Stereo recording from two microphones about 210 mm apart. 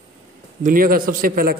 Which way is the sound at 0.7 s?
45° right (ahead or behind).